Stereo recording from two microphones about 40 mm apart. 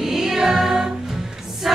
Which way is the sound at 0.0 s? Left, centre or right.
Centre.